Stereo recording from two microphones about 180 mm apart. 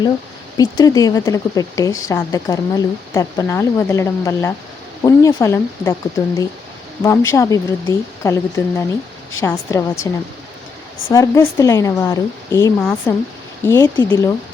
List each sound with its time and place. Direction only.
0.5 s a woman's voice: 20° left (ahead or behind)